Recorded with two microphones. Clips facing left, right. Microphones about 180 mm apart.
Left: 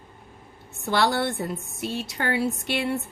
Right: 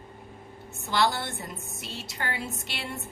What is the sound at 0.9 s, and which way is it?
A woman's voice, 60° left (ahead or behind).